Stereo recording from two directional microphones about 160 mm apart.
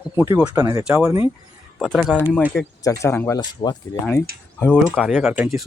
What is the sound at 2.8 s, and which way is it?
Speech, 15° left (ahead or behind).